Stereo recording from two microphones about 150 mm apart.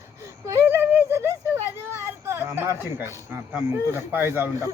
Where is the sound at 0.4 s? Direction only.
20° right (ahead or behind).